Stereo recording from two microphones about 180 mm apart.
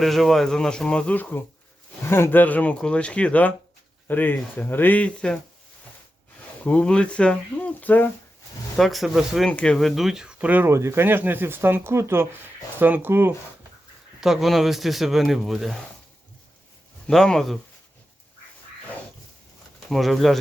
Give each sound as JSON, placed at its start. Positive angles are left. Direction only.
{"t": 0.0, "sound": "speech", "side_deg": 0}
{"t": 6.7, "sound": "speech", "side_deg": 5}
{"t": 14.2, "sound": "speech", "side_deg": 0}
{"t": 17.1, "sound": "speech", "side_deg": 0}
{"t": 19.9, "sound": "speech", "side_deg": 0}